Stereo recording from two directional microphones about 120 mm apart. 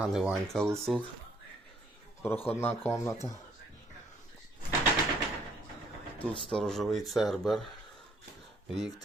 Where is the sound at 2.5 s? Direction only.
20° left (ahead or behind).